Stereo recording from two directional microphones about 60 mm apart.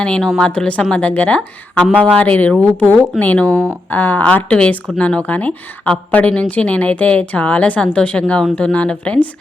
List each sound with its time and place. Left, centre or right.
0.2 s a woman's voice: centre